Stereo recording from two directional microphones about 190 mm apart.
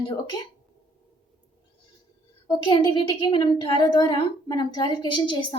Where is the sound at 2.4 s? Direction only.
25° left (ahead or behind).